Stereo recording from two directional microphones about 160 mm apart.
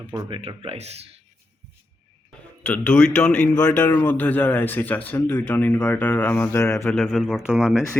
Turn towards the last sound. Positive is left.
turn(degrees=0)  # may be behind; listen again after turning